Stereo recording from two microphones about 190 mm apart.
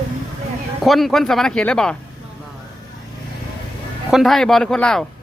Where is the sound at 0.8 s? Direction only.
Centre (ahead or behind).